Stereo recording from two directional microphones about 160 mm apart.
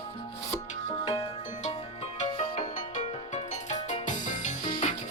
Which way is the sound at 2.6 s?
50° left (ahead or behind).